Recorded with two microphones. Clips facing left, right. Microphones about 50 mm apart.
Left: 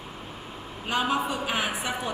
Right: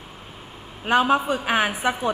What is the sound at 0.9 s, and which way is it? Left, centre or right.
Speech, right.